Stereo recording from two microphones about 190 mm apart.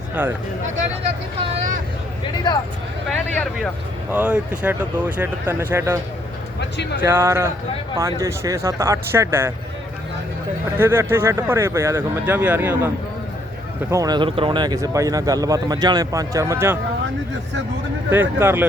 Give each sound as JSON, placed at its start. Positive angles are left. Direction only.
{"t": 0.1, "sound": "speech", "side_deg": -10}
{"t": 3.1, "sound": "speech", "side_deg": 5}
{"t": 4.1, "sound": "speech", "side_deg": -5}
{"t": 7.0, "sound": "speech", "side_deg": -10}
{"t": 10.8, "sound": "speech", "side_deg": -10}
{"t": 13.9, "sound": "speech", "side_deg": -20}
{"t": 18.1, "sound": "speech", "side_deg": -10}